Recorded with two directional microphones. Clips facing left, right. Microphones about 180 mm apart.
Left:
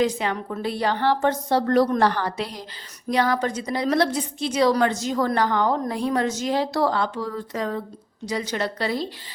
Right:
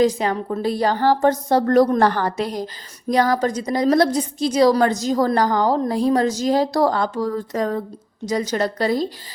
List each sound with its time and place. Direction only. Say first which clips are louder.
0.0 s a woman's voice: right 5 dB; 40° right (ahead or behind)